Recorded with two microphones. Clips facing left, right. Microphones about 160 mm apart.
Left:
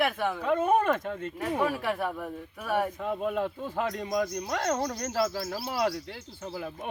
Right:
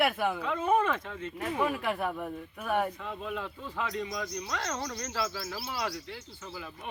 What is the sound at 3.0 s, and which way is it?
Speech, 45° left (ahead or behind).